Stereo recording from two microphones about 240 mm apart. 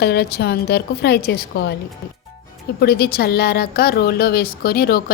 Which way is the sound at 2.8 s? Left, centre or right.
Left.